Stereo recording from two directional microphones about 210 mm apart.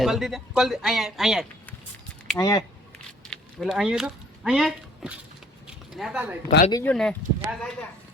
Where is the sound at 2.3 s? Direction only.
15° left (ahead or behind).